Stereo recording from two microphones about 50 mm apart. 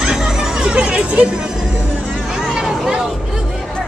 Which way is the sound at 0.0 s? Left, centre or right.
Centre.